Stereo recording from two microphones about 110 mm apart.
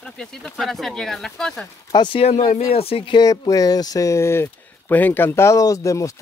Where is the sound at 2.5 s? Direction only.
65° left (ahead or behind).